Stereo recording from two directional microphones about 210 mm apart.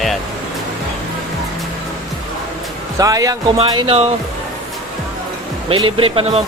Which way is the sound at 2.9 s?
15° right (ahead or behind).